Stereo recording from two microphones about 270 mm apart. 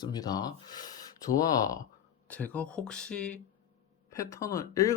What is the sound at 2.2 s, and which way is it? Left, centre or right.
Speech, centre.